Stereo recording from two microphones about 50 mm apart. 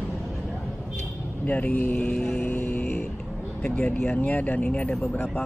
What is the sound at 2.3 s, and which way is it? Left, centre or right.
Vehicle, left.